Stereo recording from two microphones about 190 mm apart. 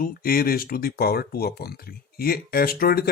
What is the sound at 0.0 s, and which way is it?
Speech, 50° left (ahead or behind).